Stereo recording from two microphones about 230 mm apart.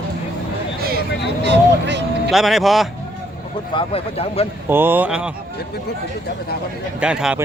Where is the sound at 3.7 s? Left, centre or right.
Left.